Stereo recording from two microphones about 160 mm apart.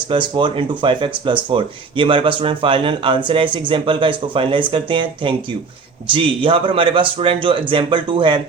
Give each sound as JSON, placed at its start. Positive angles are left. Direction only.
{"t": 0.1, "sound": "speech", "side_deg": -30}